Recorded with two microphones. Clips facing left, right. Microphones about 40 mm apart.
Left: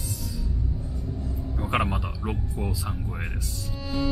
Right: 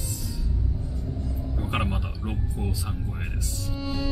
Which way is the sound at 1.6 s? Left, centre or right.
Centre.